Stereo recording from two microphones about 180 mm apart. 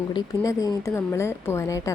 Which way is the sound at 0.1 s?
20° left (ahead or behind).